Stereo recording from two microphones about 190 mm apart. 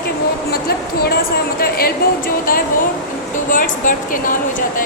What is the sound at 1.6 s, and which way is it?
A woman's voice, 50° left (ahead or behind).